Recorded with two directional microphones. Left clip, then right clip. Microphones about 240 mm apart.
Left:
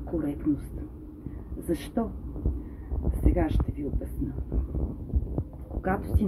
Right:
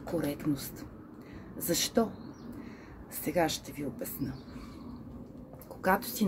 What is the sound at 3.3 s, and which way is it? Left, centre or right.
Speech, centre.